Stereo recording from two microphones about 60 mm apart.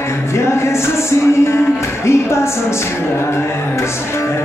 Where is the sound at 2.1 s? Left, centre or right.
Left.